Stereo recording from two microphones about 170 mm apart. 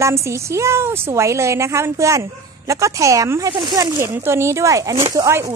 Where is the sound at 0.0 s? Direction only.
15° right (ahead or behind).